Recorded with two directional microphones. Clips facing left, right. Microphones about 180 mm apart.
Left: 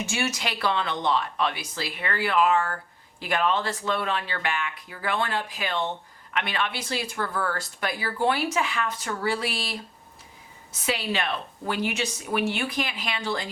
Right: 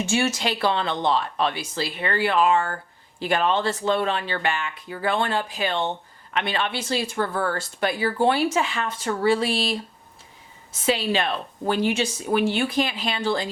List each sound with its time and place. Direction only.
0.0 s speech: 30° right (ahead or behind)